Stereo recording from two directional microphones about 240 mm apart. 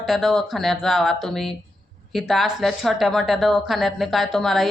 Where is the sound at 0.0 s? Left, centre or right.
Centre.